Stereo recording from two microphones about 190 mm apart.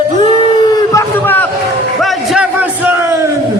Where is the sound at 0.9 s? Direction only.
10° left (ahead or behind).